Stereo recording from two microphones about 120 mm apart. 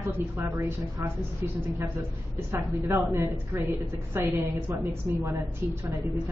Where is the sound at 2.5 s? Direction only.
20° right (ahead or behind).